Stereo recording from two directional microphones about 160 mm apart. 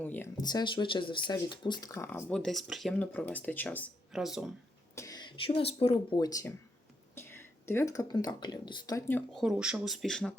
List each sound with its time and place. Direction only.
0.0 s speech: 10° left (ahead or behind)
0.3 s speech: 25° left (ahead or behind)
2.3 s speech: centre (ahead or behind)
4.1 s speech: 5° right (ahead or behind)
4.9 s speech: 25° left (ahead or behind)
6.1 s speech: 25° left (ahead or behind)
9.3 s speech: 5° right (ahead or behind)